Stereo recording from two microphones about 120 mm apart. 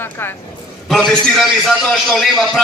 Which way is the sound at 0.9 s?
5° left (ahead or behind).